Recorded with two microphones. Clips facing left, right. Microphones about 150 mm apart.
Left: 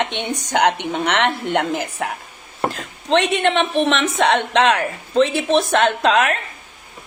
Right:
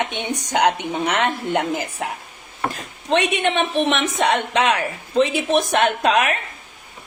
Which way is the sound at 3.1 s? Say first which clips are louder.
Left 2 dB; 15° right (ahead or behind).